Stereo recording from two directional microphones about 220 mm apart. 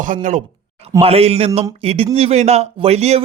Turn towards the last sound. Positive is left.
turn(degrees=-30)  # may be behind; listen again after turning